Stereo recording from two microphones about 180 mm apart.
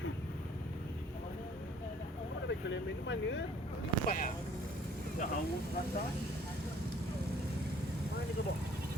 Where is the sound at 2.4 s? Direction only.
85° left.